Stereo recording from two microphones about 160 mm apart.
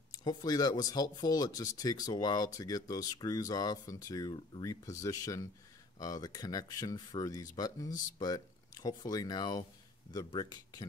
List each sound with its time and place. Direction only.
0.1 s speech: 25° left (ahead or behind)